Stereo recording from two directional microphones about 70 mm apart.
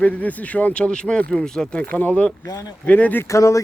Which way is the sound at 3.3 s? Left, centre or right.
Left.